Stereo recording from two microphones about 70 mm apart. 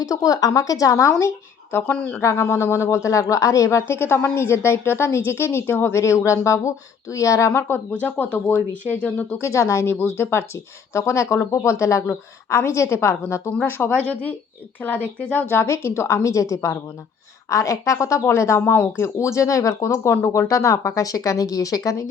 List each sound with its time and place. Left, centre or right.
0.0 s speech: left
1.7 s a woman's voice: left
8.0 s speech: left
9.4 s speech: left
9.8 s a woman's voice: left
14.1 s speech: left
15.4 s speech: left
18.6 s speech: left
20.5 s speech: left